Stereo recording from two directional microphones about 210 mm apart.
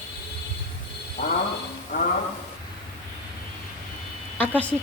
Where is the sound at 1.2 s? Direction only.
55° left (ahead or behind).